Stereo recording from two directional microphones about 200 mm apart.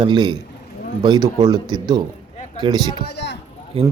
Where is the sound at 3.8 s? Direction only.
30° right (ahead or behind).